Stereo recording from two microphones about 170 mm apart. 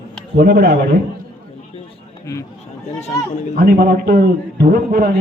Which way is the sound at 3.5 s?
60° right (ahead or behind).